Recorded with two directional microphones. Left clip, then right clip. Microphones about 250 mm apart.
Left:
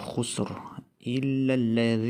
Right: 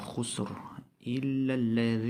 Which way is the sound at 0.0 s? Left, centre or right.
Left.